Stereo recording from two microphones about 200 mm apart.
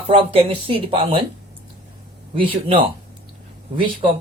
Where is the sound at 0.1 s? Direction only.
30° right (ahead or behind).